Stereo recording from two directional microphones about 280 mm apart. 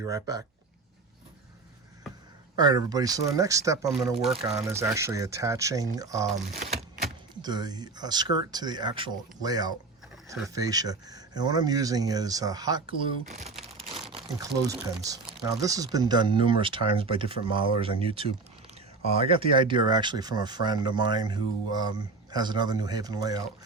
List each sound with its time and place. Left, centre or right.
0.0 s speech: centre
2.6 s speech: centre
7.4 s speech: centre
13.9 s crumpling: centre
14.7 s speech: centre